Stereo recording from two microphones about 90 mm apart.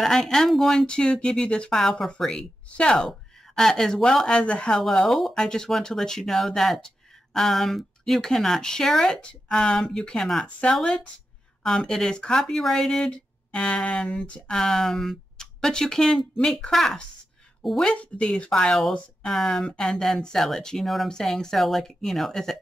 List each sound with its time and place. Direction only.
0.0 s speech: 5° left (ahead or behind)